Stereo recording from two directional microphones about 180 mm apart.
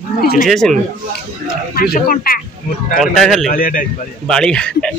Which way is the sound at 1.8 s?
55° left (ahead or behind).